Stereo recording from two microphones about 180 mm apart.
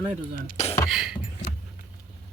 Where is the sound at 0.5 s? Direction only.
35° left (ahead or behind).